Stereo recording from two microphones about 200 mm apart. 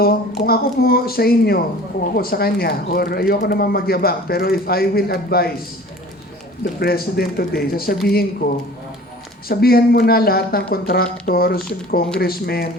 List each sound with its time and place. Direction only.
0.0 s speech: 50° left (ahead or behind)
6.7 s speech: 50° left (ahead or behind)